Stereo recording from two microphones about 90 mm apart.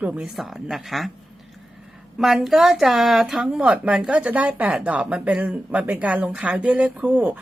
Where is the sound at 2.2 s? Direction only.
5° right (ahead or behind).